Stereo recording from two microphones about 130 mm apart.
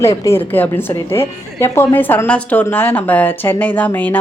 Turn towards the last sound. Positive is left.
turn(degrees=15)  # may be behind; listen again after turning